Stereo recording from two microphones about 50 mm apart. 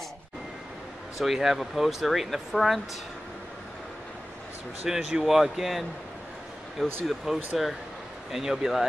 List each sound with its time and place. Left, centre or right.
1.1 s speech: centre
4.8 s speech: centre
7.1 s speech: centre